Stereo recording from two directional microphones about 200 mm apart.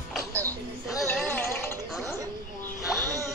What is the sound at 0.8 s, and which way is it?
Music, centre (ahead or behind).